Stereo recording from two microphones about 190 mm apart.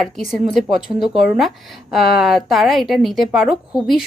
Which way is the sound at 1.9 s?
Centre (ahead or behind).